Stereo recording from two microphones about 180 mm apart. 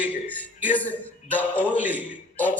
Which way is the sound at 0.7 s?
10° left (ahead or behind).